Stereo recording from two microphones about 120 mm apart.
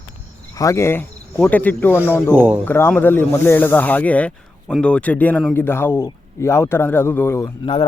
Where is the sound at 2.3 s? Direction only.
15° right (ahead or behind).